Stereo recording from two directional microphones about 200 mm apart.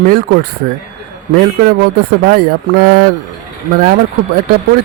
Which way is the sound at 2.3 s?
45° right (ahead or behind).